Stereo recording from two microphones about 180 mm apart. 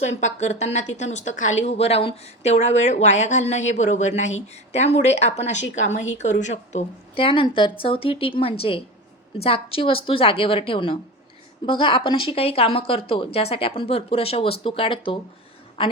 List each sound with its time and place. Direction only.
0.2 s a woman's voice: 40° left (ahead or behind)